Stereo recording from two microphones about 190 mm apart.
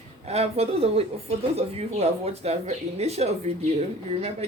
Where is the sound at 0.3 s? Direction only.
35° right (ahead or behind).